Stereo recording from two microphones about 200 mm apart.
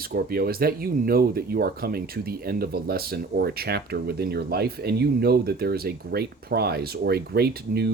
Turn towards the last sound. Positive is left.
turn(degrees=-55)  # may be behind; listen again after turning